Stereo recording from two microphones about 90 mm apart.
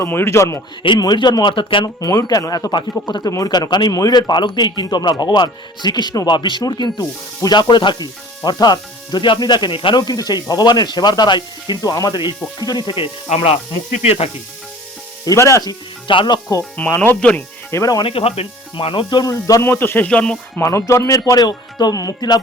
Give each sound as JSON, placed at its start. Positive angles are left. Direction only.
{"t": 0.1, "sound": "speech", "side_deg": 30}
{"t": 0.9, "sound": "speech", "side_deg": 50}
{"t": 1.8, "sound": "speech", "side_deg": 40}
{"t": 10.0, "sound": "speech", "side_deg": 45}
{"t": 11.8, "sound": "speech", "side_deg": 40}
{"t": 15.3, "sound": "speech", "side_deg": 35}
{"t": 16.0, "sound": "speech", "side_deg": 60}
{"t": 16.9, "sound": "speech", "side_deg": 20}
{"t": 17.7, "sound": "speech", "side_deg": 35}
{"t": 18.0, "sound": "speech", "side_deg": 90}
{"t": 19.2, "sound": "speech", "side_deg": 40}
{"t": 19.6, "sound": "speech", "side_deg": 25}
{"t": 20.1, "sound": "speech", "side_deg": 10}
{"t": 20.7, "sound": "speech", "side_deg": 35}